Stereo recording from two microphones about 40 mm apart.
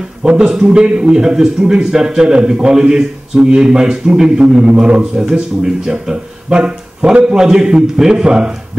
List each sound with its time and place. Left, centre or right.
0.4 s a man's voice: centre
5.3 s speech: centre
6.6 s a man's voice: right